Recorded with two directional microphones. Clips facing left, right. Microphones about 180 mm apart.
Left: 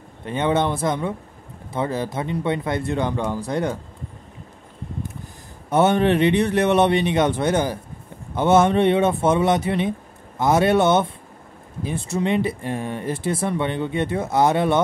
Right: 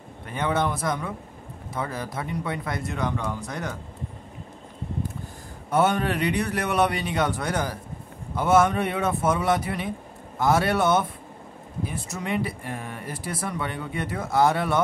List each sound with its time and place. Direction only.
0.2 s speech: 25° left (ahead or behind)
5.7 s speech: 25° left (ahead or behind)